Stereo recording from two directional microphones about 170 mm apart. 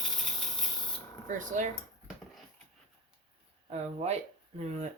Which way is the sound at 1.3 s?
50° right (ahead or behind).